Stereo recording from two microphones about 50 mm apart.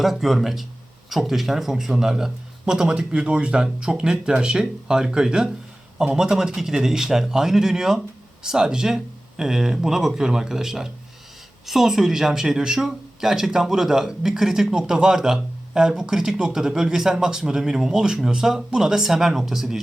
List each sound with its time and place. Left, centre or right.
0.0 s speech: centre